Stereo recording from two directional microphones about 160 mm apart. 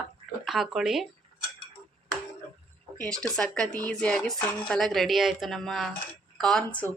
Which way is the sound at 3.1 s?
5° left (ahead or behind).